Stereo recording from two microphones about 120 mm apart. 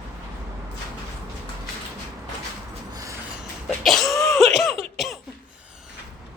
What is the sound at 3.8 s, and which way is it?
Cough, centre (ahead or behind).